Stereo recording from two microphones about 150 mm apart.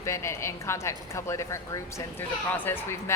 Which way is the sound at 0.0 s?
20° left (ahead or behind).